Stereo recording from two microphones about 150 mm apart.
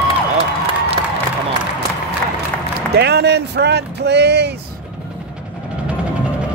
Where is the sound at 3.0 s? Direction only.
90° right.